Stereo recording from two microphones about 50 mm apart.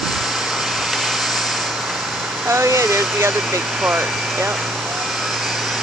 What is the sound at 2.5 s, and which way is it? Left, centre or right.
Speech, right.